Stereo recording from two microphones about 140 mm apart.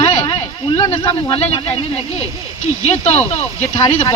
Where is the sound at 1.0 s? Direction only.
25° left (ahead or behind).